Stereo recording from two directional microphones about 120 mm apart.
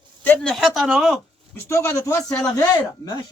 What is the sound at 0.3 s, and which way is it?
Speech, 5° left (ahead or behind).